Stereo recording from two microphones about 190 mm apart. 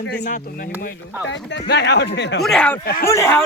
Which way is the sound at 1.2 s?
70° left (ahead or behind).